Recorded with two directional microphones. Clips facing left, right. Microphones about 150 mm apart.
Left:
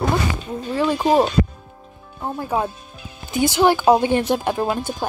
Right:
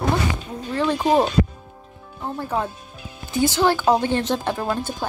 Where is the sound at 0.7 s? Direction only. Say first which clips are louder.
Left 2 dB; 10° left (ahead or behind).